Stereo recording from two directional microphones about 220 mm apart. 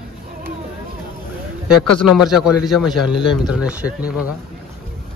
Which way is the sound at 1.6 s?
Centre (ahead or behind).